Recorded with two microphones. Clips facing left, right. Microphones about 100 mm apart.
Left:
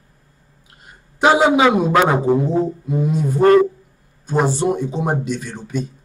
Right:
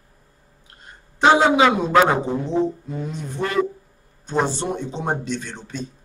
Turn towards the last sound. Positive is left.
turn(degrees=10)  # may be behind; listen again after turning